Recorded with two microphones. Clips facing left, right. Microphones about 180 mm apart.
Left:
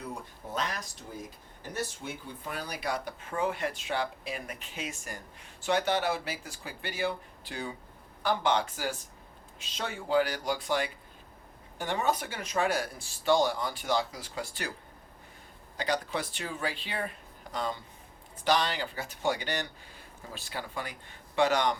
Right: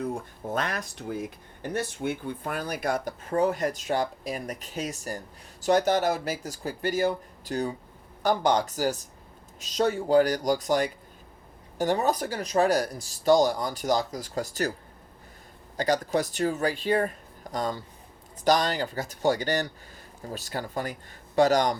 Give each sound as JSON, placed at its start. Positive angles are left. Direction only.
{"t": 0.0, "sound": "speech", "side_deg": -50}
{"t": 15.8, "sound": "speech", "side_deg": -40}